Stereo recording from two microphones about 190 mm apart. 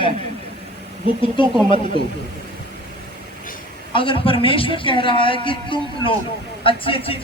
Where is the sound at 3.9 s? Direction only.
25° left (ahead or behind).